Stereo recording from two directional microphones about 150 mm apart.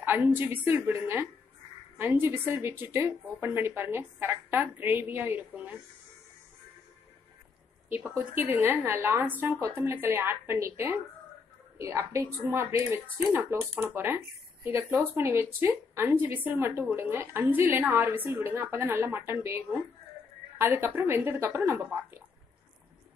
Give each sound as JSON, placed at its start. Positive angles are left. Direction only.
{"t": 0.0, "sound": "speech", "side_deg": -15}
{"t": 8.2, "sound": "speech", "side_deg": -10}